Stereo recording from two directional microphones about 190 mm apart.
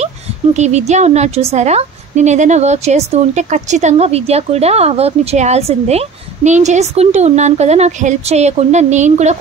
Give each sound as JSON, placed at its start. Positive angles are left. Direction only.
{"t": 0.6, "sound": "a woman's voice", "side_deg": -35}